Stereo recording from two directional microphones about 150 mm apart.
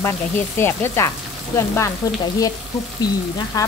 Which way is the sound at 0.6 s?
15° left (ahead or behind).